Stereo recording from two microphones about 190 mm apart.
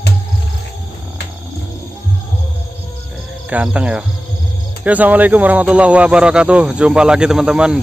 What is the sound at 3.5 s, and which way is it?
Speech, 5° right (ahead or behind).